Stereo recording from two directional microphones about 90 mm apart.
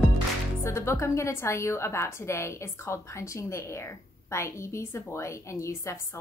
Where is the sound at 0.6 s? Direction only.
30° left (ahead or behind).